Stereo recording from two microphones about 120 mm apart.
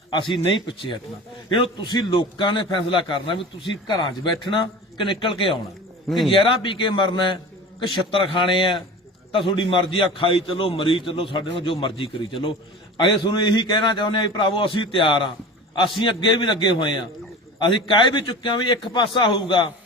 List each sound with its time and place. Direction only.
0.1 s speech: 45° left (ahead or behind)
1.5 s a man's voice: 45° left (ahead or behind)
6.1 s a man's voice: centre (ahead or behind)
6.3 s a man's voice: 50° left (ahead or behind)